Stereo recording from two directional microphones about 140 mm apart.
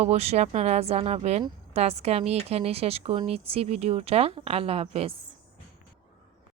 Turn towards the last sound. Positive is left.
turn(degrees=-45)  # may be behind; listen again after turning